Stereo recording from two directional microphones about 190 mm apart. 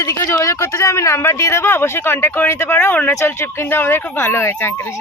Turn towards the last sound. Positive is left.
turn(degrees=15)  # may be behind; listen again after turning